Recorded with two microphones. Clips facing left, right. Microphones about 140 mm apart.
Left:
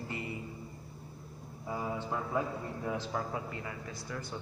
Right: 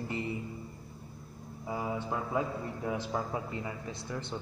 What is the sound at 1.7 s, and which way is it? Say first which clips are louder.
A man's voice: right 1 dB; 15° right (ahead or behind).